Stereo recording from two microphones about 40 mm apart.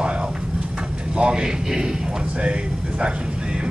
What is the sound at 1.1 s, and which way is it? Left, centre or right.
Speech, right.